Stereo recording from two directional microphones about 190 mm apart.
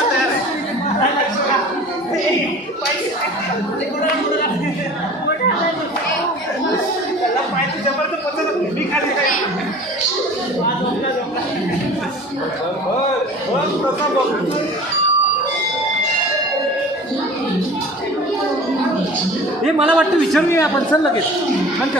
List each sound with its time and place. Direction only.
19.6 s a man's voice: 5° right (ahead or behind)
20.5 s a woman's voice: 15° left (ahead or behind)